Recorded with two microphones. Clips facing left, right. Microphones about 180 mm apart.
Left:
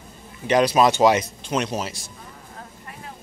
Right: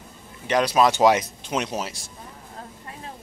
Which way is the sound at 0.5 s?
5° left (ahead or behind).